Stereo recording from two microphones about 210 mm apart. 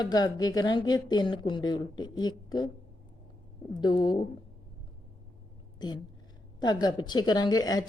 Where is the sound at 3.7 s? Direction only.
20° left (ahead or behind).